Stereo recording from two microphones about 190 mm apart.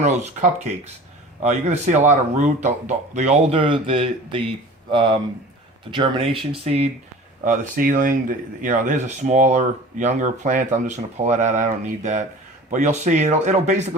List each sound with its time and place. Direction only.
1.4 s speech: 35° right (ahead or behind)
7.4 s speech: 45° right (ahead or behind)